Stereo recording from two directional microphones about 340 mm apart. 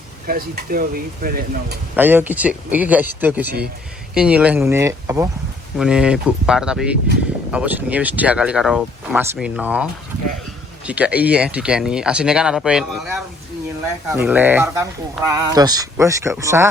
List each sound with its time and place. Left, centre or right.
0.3 s speech: right
2.0 s speech: centre
10.8 s speech: centre